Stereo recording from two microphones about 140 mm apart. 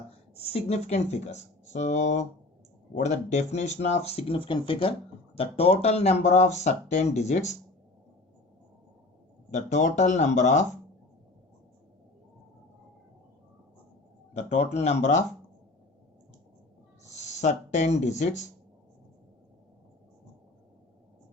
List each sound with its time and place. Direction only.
0.3 s speech: 45° left (ahead or behind)
9.5 s speech: 55° left (ahead or behind)
14.3 s speech: 55° left (ahead or behind)
17.0 s speech: 55° left (ahead or behind)